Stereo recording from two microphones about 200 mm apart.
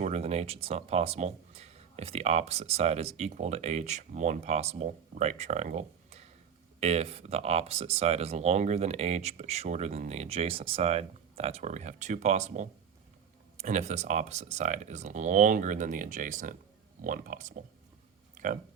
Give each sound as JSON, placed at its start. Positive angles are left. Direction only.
{"t": 0.0, "sound": "speech", "side_deg": -35}